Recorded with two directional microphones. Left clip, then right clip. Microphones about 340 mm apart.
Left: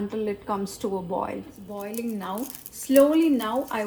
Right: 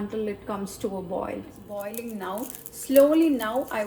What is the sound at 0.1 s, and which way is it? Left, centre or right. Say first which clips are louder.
A woman's voice: left 2 dB; centre.